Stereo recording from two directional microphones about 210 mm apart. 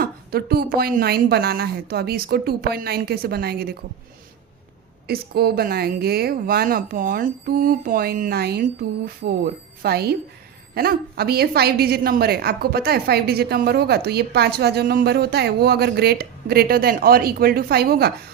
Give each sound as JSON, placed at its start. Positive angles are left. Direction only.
{"t": 0.0, "sound": "a woman's voice", "side_deg": -45}
{"t": 5.0, "sound": "a woman's voice", "side_deg": -45}